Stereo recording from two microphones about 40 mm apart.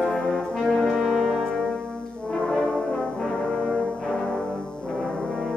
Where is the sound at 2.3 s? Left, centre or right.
Centre.